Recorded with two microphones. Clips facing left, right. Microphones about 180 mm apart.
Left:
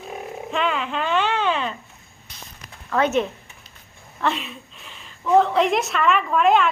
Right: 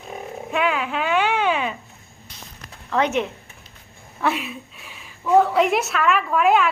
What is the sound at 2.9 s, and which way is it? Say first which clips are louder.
A woman's voice: left 1 dB; 15° right (ahead or behind).